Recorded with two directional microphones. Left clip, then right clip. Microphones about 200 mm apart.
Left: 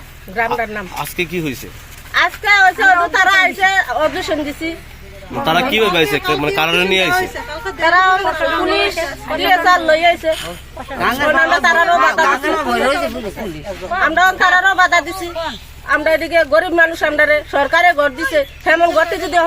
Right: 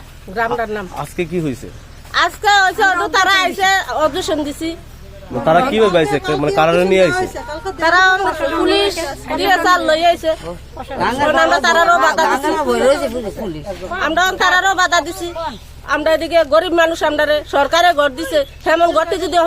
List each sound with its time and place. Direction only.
0.3 s speech: 25° right (ahead or behind)
0.9 s speech: 45° right (ahead or behind)
2.1 s speech: 25° right (ahead or behind)
5.5 s speech: 45° right (ahead or behind)
7.8 s speech: 30° right (ahead or behind)
8.4 s speech: 50° right (ahead or behind)
8.6 s speech: 30° right (ahead or behind)
10.9 s speech: 55° right (ahead or behind)
11.3 s speech: 25° right (ahead or behind)
11.9 s speech: 55° right (ahead or behind)
14.0 s speech: 30° right (ahead or behind)